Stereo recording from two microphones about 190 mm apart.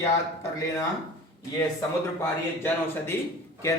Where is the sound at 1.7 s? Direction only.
15° left (ahead or behind).